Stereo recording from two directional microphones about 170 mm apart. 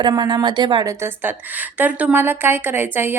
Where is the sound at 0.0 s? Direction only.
25° right (ahead or behind).